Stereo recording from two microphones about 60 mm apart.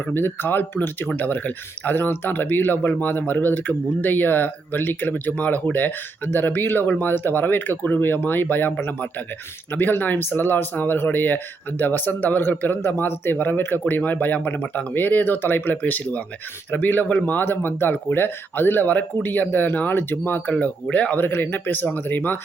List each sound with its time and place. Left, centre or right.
0.1 s speech: left
21.2 s speech: left